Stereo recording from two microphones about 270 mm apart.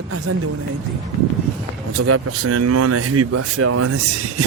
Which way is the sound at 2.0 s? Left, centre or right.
Right.